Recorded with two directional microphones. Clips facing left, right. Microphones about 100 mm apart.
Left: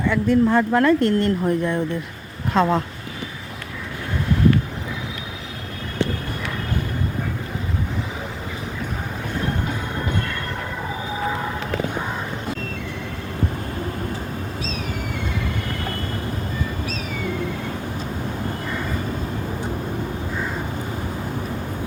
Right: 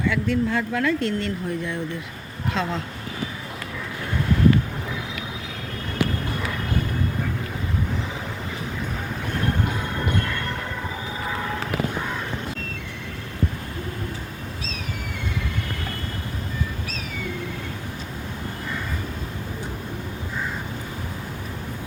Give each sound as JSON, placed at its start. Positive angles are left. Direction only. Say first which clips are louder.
{"t": 0.1, "sound": "speech", "louder": "left 8 dB", "side_deg": 40}